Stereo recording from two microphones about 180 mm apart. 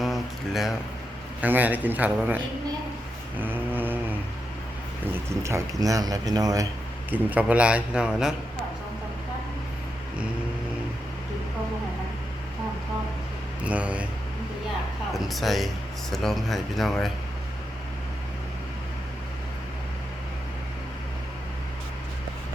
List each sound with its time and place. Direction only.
0.0 s a sound: centre (ahead or behind)
1.4 s a man's voice: 10° right (ahead or behind)
3.3 s vehicle: 10° right (ahead or behind)
5.1 s speech: 15° right (ahead or behind)
7.1 s a man's voice: 10° right (ahead or behind)
13.6 s speech: 5° right (ahead or behind)
15.1 s a man's voice: centre (ahead or behind)